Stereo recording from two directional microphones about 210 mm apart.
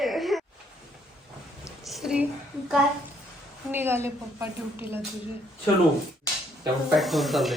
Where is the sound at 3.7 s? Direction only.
10° right (ahead or behind).